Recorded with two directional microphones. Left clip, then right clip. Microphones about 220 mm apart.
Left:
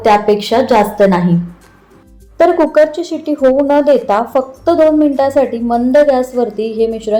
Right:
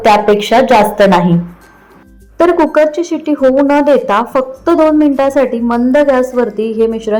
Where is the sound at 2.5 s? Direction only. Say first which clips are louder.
Right 1 dB; 25° right (ahead or behind).